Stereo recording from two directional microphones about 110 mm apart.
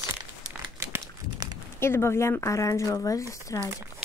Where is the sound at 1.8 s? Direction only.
25° left (ahead or behind).